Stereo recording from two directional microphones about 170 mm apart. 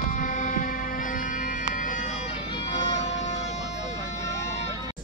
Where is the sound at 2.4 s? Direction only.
30° left (ahead or behind).